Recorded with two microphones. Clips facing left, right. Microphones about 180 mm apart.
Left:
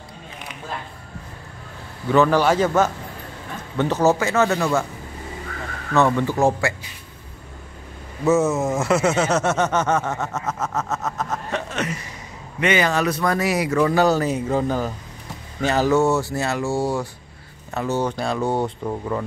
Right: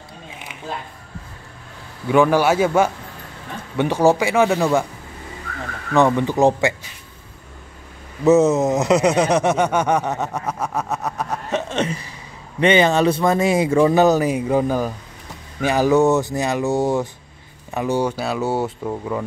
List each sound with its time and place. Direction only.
2.0 s speech: 10° right (ahead or behind)
5.9 s speech: 15° right (ahead or behind)
8.3 s speech: 20° right (ahead or behind)
11.7 s speech: 30° right (ahead or behind); by 19.2 s 5° right (ahead or behind)